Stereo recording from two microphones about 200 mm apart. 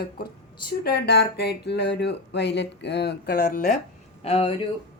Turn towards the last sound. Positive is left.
turn(degrees=30)  # may be behind; listen again after turning